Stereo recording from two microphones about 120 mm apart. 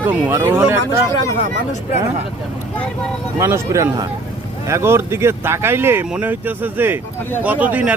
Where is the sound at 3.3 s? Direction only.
25° right (ahead or behind).